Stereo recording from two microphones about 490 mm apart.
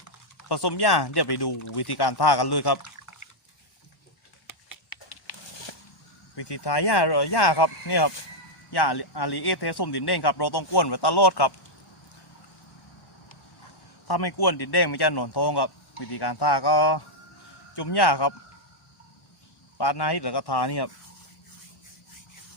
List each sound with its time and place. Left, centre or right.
0.4 s a man's voice: left
2.8 s liquid: left
4.4 s typing: left
6.3 s a man's voice: left
14.1 s a man's voice: left
19.8 s a man's voice: left